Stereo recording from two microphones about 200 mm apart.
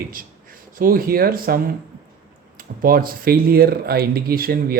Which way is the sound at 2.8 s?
45° right (ahead or behind).